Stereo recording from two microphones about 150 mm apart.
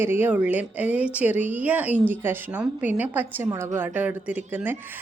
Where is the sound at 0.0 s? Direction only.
15° right (ahead or behind).